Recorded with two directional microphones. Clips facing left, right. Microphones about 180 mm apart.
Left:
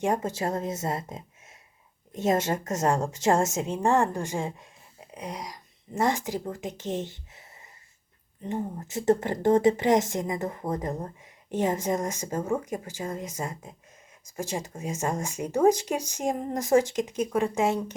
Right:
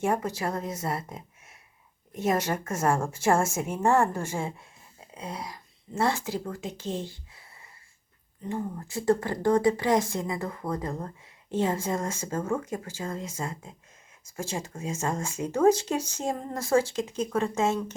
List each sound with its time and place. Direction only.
0.0 s speech: 20° left (ahead or behind)
8.4 s speech: 20° left (ahead or behind)